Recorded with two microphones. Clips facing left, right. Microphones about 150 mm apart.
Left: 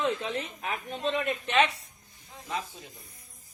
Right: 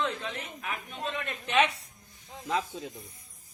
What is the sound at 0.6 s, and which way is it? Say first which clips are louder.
Speech: left 3 dB; 30° left (ahead or behind).